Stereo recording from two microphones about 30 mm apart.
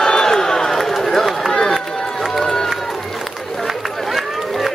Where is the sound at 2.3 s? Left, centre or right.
Centre.